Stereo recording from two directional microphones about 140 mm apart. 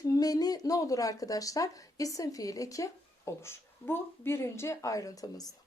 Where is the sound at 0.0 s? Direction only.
25° left (ahead or behind).